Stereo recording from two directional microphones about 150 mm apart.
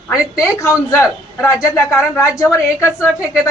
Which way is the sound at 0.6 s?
20° left (ahead or behind).